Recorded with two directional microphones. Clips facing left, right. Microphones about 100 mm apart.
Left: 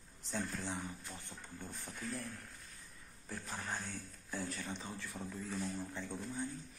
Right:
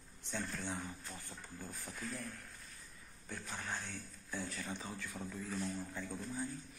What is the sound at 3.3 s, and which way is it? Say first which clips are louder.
A man's voice: left 1 dB; 10° left (ahead or behind).